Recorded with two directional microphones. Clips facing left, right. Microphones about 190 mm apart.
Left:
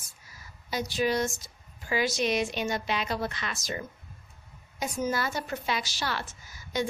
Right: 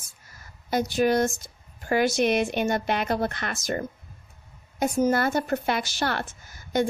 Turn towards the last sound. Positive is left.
turn(degrees=-55)  # may be behind; listen again after turning